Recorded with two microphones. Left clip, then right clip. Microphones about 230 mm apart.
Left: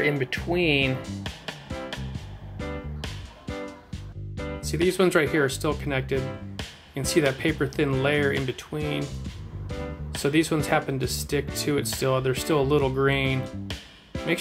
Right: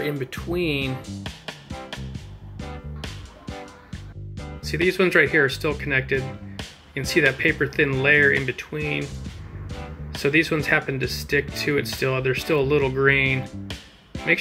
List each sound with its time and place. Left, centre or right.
0.6 s speech: right
0.8 s speech: centre
13.0 s music: centre